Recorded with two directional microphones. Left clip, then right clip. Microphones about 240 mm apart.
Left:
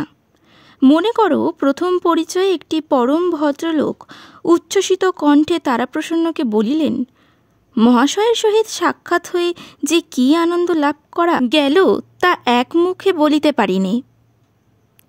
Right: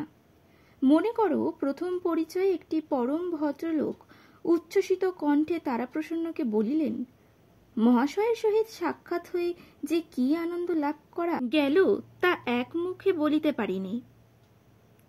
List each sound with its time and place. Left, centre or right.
0.7 s speech: left